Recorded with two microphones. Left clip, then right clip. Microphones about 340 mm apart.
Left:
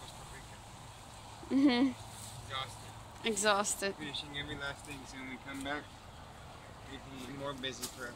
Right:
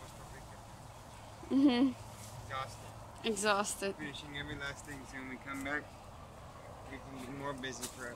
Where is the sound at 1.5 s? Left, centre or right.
Centre.